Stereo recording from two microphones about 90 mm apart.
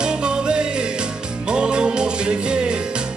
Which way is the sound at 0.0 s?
10° right (ahead or behind).